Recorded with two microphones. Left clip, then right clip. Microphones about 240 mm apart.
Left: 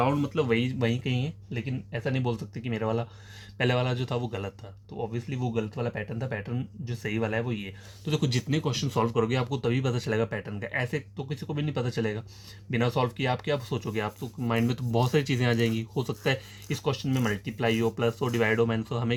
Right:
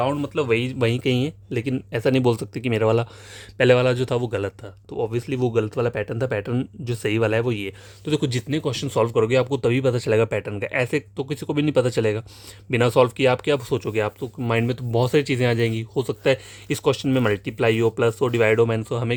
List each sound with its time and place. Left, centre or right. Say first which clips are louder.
0.0 s speech: right 4 dB; right
4.9 s speech: right 10 dB; right